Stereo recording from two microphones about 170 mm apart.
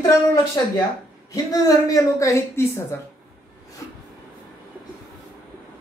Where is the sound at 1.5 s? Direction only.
20° left (ahead or behind).